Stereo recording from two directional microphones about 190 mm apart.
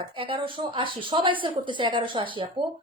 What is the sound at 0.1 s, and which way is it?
A woman's voice, 25° right (ahead or behind).